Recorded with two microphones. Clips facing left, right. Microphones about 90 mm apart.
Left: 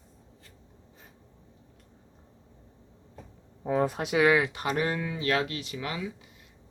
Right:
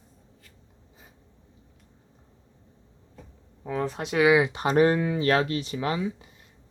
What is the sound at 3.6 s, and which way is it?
Speech, 20° left (ahead or behind).